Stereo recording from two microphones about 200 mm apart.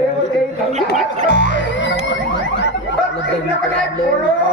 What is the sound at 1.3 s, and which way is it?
Music, 60° left (ahead or behind).